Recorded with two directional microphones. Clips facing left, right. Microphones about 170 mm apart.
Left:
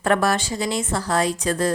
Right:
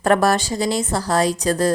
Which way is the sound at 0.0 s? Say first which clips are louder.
Right 3 dB; 40° right (ahead or behind).